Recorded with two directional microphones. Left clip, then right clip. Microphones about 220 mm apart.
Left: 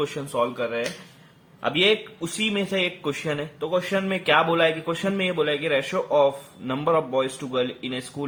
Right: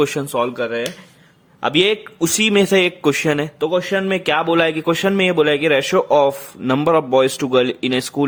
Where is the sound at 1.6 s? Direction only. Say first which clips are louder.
Right 5 dB; 55° right (ahead or behind).